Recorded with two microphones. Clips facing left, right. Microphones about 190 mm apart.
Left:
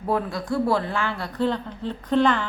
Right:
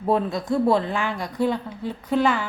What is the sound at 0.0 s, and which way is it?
Speech, 25° right (ahead or behind).